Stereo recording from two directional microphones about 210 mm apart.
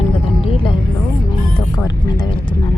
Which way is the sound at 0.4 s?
25° left (ahead or behind).